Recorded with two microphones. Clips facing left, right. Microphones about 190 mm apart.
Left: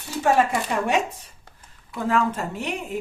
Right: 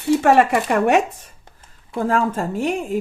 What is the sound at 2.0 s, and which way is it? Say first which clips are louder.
Speech: right 3 dB; 45° right (ahead or behind).